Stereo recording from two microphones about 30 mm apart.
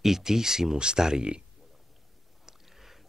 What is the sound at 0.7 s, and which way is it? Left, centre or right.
Speech, right.